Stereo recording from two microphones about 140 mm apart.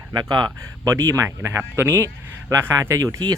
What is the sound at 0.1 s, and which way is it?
Speech, 30° right (ahead or behind).